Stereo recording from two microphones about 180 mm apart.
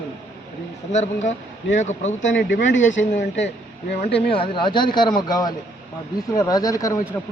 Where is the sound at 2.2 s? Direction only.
90° left.